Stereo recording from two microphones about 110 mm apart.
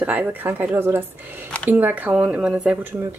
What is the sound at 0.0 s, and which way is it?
Speech, 15° right (ahead or behind).